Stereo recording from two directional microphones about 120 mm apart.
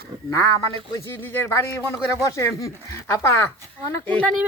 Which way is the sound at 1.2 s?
15° left (ahead or behind).